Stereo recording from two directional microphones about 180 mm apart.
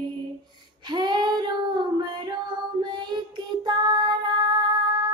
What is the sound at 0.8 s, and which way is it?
Child singing, 25° right (ahead or behind).